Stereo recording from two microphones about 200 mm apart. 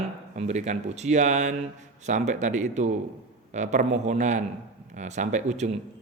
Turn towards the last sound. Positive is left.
turn(degrees=-35)  # may be behind; listen again after turning